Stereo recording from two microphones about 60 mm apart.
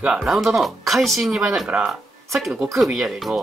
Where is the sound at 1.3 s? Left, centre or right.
Centre.